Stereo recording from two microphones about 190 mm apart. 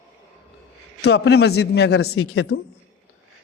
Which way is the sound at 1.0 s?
60° left (ahead or behind).